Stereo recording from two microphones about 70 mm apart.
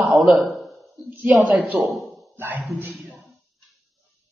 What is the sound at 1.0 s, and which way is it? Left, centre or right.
Speech, right.